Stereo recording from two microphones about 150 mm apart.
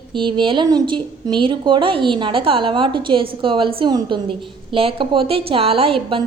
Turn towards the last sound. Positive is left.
turn(degrees=-35)  # may be behind; listen again after turning